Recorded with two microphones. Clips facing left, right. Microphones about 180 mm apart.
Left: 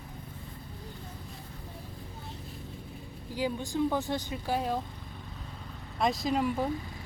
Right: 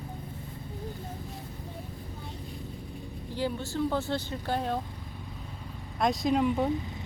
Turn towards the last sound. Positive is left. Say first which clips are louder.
# right 3 dB
turn(degrees=0)  # may be behind; listen again after turning